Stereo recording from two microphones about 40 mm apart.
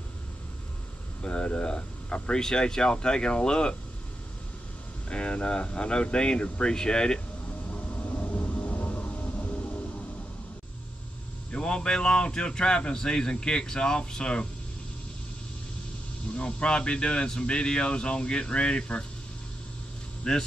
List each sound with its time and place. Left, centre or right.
1.2 s a man's voice: left
5.1 s a man's voice: left
7.7 s vehicle: left
8.5 s music: left
11.5 s a man's voice: left
16.3 s a man's voice: left
20.2 s a man's voice: left